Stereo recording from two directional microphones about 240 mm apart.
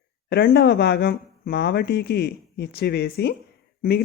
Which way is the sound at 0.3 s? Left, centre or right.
Left.